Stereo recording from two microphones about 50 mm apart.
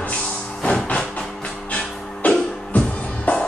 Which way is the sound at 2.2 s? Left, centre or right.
Left.